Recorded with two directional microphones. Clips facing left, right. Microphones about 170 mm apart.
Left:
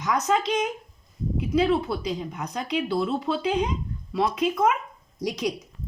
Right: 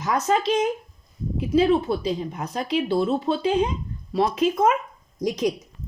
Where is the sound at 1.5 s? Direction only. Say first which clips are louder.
Right 4 dB; 30° right (ahead or behind).